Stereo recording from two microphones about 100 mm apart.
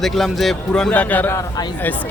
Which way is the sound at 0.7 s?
10° left (ahead or behind).